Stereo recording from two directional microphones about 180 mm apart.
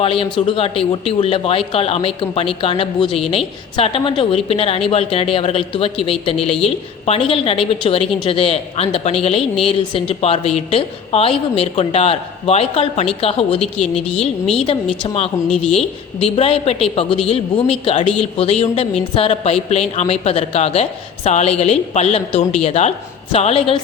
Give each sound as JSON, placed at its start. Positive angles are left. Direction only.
{"t": 0.0, "sound": "a woman's voice", "side_deg": 30}
{"t": 14.2, "sound": "a woman's voice", "side_deg": 5}
{"t": 14.7, "sound": "a woman's voice", "side_deg": 30}
{"t": 15.4, "sound": "a woman's voice", "side_deg": 0}
{"t": 16.1, "sound": "a woman's voice", "side_deg": 30}